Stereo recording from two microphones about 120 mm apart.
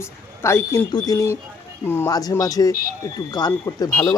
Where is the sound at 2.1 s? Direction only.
30° left (ahead or behind).